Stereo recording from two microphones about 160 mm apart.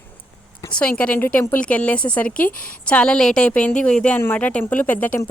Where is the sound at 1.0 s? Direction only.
10° left (ahead or behind).